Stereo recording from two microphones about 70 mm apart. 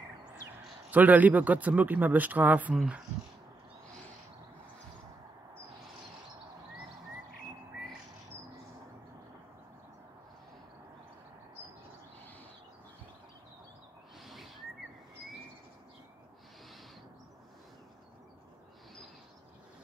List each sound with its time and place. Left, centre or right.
0.8 s a man's voice: right
2.7 s speech: centre
14.2 s owl: centre